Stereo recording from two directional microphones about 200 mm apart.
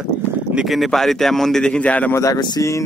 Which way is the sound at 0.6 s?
Centre (ahead or behind).